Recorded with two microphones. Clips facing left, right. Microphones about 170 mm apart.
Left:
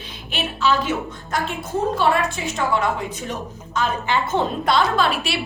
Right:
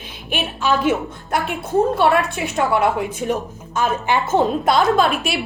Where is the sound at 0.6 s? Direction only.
55° right (ahead or behind).